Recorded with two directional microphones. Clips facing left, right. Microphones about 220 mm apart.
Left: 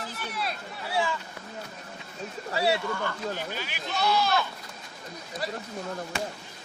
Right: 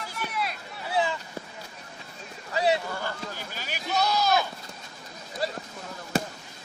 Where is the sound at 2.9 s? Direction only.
35° right (ahead or behind).